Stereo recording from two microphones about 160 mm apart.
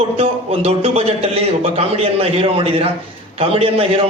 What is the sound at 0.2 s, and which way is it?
Speech, 35° right (ahead or behind).